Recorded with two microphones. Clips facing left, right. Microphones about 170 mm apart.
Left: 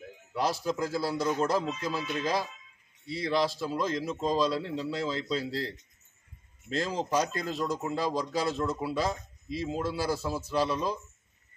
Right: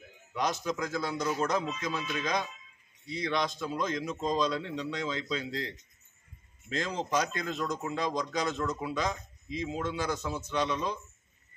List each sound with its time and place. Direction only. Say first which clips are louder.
0.3 s speech: left 2 dB; 30° left (ahead or behind)
1.9 s speech: left 2 dB; 5° left (ahead or behind)
3.3 s speech: left 4 dB; 30° left (ahead or behind)
4.2 s speech: left 2 dB; 5° left (ahead or behind)
4.5 s speech: left 2 dB; 35° left (ahead or behind)
7.1 s speech: left 2 dB; 35° left (ahead or behind)